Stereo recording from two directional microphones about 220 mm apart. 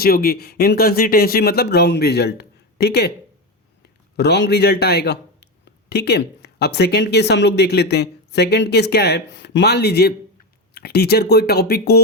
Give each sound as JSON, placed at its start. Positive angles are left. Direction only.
{"t": 0.0, "sound": "speech", "side_deg": 45}
{"t": 4.2, "sound": "a man's voice", "side_deg": 50}